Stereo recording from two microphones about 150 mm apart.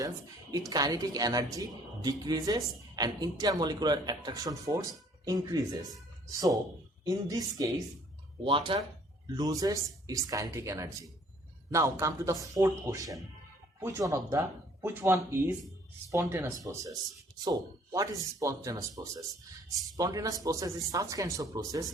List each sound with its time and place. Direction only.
0.7 s a woman's voice: 25° right (ahead or behind)
8.4 s a woman's voice: 35° right (ahead or behind)